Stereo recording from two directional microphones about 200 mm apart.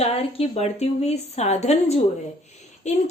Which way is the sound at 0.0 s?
30° left (ahead or behind).